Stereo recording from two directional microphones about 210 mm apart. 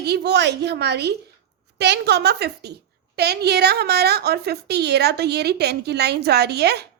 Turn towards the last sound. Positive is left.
turn(degrees=-50)  # may be behind; listen again after turning